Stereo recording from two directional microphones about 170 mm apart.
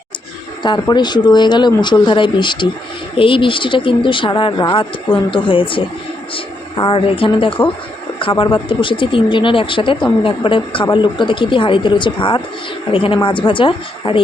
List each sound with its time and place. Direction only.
0.6 s speech: 25° left (ahead or behind)